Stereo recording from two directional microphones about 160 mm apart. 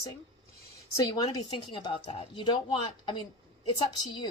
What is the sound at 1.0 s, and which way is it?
A woman's voice, 25° left (ahead or behind).